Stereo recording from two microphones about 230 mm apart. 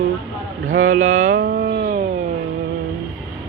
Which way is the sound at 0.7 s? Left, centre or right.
Right.